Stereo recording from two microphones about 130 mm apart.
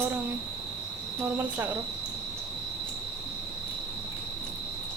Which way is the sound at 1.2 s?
15° right (ahead or behind).